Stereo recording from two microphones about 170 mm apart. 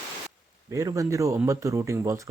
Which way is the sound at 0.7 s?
20° right (ahead or behind).